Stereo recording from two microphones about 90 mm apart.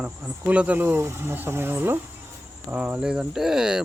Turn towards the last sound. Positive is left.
turn(degrees=-5)  # may be behind; listen again after turning